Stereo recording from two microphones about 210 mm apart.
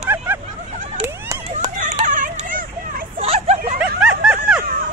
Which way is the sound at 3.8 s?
5° right (ahead or behind).